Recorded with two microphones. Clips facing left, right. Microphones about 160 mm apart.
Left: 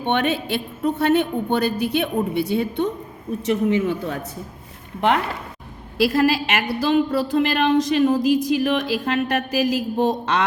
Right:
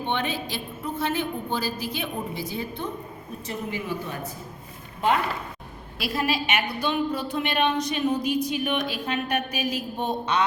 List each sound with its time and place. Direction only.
0.0 s a woman's voice: 65° left (ahead or behind)
6.0 s a woman's voice: 90° left